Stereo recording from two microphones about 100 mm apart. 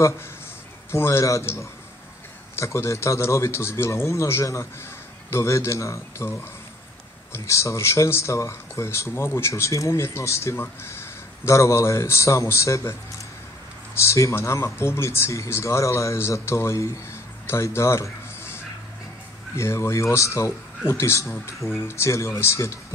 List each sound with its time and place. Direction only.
0.9 s speech: 25° left (ahead or behind)
13.9 s speech: 30° left (ahead or behind)